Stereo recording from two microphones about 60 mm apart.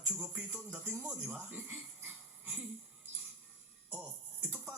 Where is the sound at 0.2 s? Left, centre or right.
Right.